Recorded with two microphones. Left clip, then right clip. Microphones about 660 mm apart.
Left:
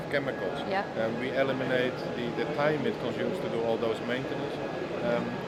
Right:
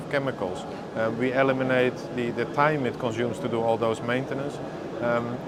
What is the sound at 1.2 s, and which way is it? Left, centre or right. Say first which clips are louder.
Speech: right 8 dB; right.